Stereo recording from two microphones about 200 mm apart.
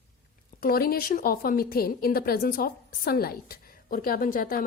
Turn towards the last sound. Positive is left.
turn(degrees=45)  # may be behind; listen again after turning